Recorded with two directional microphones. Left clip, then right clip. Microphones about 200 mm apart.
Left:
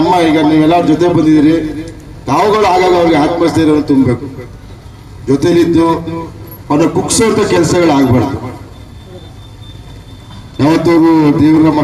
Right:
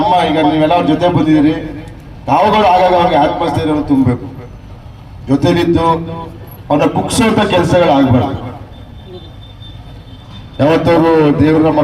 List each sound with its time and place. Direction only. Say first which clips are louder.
0.1 s a man's voice: left 2 dB; 40° right (ahead or behind)
5.3 s a man's voice: left 2 dB; 40° right (ahead or behind)
10.6 s a man's voice: left 1 dB; 40° right (ahead or behind)